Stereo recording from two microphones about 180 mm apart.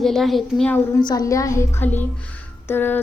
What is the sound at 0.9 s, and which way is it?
A woman's voice, 20° left (ahead or behind).